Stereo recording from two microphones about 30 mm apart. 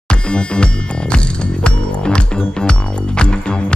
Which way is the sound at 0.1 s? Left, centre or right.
Left.